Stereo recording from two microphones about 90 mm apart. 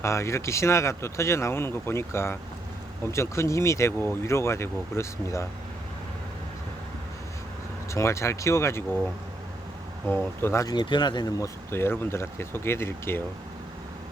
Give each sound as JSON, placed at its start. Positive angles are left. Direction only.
{"t": 0.0, "sound": "speech", "side_deg": 30}
{"t": 7.9, "sound": "speech", "side_deg": 30}
{"t": 10.1, "sound": "speech", "side_deg": 25}
{"t": 10.7, "sound": "speech", "side_deg": 55}
{"t": 11.3, "sound": "speech", "side_deg": 30}